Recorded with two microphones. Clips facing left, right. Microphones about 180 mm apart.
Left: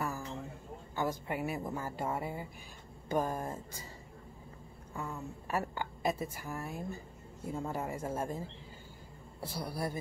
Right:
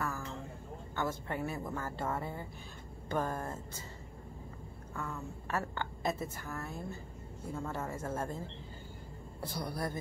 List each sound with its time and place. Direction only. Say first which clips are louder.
0.0 s a sound: left 1 dB; 15° left (ahead or behind)
0.9 s a woman's voice: left 1 dB; 15° left (ahead or behind)
4.9 s a woman's voice: left 1 dB; 15° left (ahead or behind)
9.6 s a woman's voice: left 1 dB; 10° left (ahead or behind)